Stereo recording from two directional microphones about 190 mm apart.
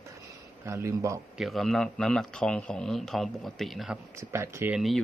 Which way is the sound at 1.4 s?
Centre (ahead or behind).